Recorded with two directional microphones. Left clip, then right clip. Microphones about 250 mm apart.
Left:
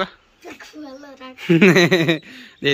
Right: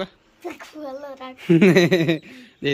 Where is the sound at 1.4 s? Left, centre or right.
Centre.